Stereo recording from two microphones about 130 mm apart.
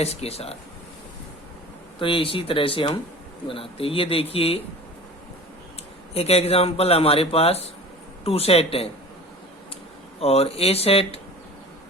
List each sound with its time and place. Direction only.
0.0 s speech: 55° left (ahead or behind)
2.0 s speech: 45° left (ahead or behind)
6.1 s speech: 50° left (ahead or behind)
10.2 s speech: 50° left (ahead or behind)